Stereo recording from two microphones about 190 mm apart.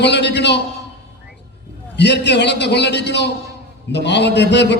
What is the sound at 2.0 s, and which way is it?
A man's voice, 65° left (ahead or behind).